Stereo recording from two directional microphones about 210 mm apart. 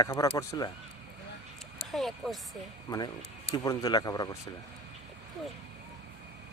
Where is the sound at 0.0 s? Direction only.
15° left (ahead or behind).